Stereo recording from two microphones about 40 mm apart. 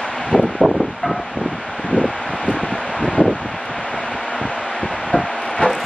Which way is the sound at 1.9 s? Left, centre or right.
Centre.